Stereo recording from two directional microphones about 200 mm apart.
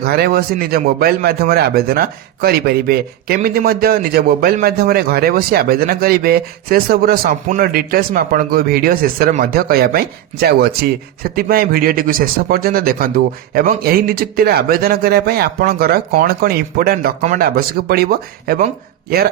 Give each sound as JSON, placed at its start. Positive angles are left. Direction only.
{"t": 0.0, "sound": "speech", "side_deg": -50}